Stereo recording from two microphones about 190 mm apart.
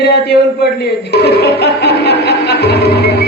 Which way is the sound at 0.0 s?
55° left (ahead or behind).